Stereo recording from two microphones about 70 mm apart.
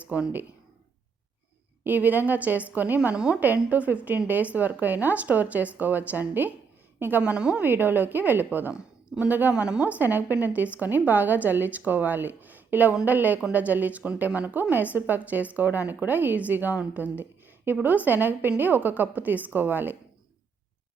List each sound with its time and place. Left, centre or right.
0.0 s speech: centre
1.8 s a woman's voice: right
7.2 s a woman's voice: centre
7.6 s a woman's voice: right